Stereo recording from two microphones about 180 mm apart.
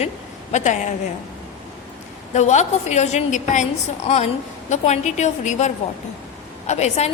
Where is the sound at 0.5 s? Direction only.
40° left (ahead or behind).